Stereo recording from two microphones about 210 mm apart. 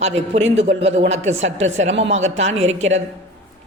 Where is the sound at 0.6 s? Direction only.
30° right (ahead or behind).